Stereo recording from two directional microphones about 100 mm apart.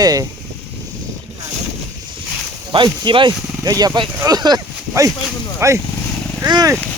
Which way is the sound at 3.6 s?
40° right (ahead or behind).